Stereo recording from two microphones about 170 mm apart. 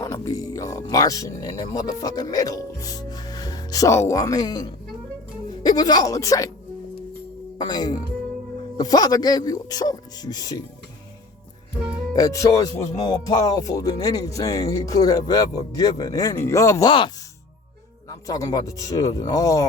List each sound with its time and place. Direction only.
0.0 s speech: 20° left (ahead or behind)
7.6 s speech: 25° left (ahead or behind)
12.1 s speech: 20° left (ahead or behind)
18.1 s speech: 20° left (ahead or behind)